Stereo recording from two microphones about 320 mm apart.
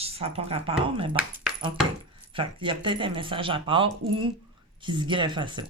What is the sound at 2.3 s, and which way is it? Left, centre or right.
Speech, centre.